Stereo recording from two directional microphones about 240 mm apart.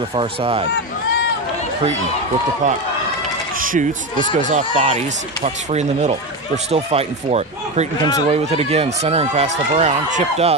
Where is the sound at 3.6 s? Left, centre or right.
Right.